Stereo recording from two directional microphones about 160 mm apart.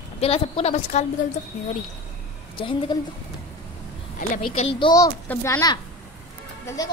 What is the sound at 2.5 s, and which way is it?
Speech, 30° left (ahead or behind).